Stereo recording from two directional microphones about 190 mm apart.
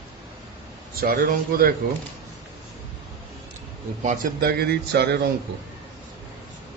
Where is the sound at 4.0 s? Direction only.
40° right (ahead or behind); by 5.2 s 60° right (ahead or behind).